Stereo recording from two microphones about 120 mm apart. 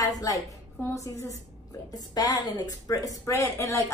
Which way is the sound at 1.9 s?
35° left (ahead or behind).